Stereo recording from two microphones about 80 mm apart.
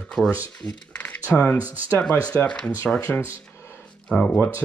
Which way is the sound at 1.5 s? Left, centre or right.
Right.